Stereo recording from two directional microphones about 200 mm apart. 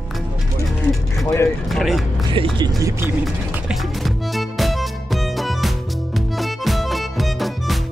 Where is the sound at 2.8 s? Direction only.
15° right (ahead or behind).